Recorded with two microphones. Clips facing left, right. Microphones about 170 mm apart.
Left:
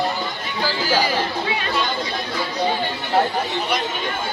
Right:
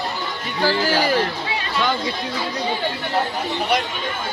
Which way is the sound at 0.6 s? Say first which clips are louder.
Right 2 dB; 55° right (ahead or behind).